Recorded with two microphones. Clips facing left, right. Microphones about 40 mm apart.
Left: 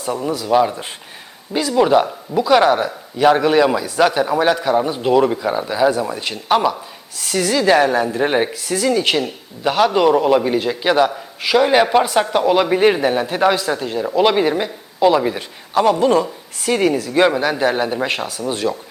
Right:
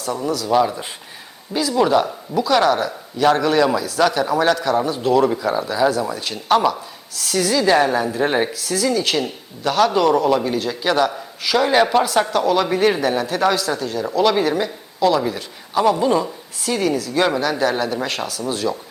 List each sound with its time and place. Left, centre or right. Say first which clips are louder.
0.0 s speech: left 1 dB; left
7.6 s speech: left 3 dB; centre
8.5 s speech: left 2 dB; left
15.7 s a man's voice: left 2 dB; centre
16.0 s a woman's voice: left 3 dB; left